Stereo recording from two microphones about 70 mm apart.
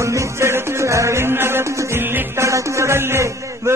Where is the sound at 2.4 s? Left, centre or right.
Right.